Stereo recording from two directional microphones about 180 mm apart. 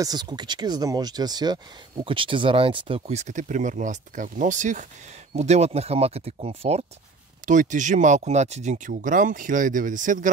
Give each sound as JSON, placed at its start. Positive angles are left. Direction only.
{"t": 0.0, "sound": "speech", "side_deg": -25}